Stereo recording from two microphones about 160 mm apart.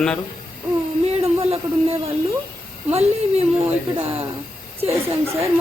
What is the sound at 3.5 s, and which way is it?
A woman's voice, 40° right (ahead or behind).